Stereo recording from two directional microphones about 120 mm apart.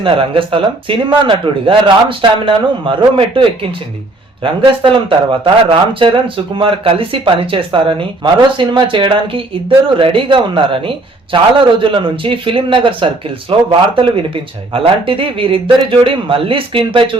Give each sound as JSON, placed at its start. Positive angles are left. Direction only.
{"t": 0.0, "sound": "speech", "side_deg": -45}